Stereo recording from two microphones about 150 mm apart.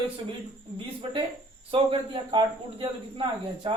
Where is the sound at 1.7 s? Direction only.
35° right (ahead or behind).